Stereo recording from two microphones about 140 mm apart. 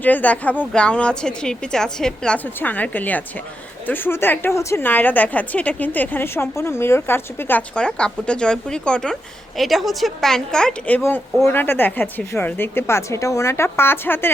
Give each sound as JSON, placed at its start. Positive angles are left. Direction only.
{"t": 0.0, "sound": "a woman's voice", "side_deg": 10}